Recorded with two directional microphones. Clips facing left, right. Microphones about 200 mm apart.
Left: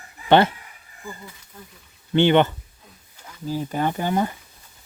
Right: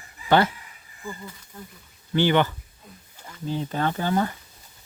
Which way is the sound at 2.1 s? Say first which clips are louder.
Left 4 dB; 25° left (ahead or behind).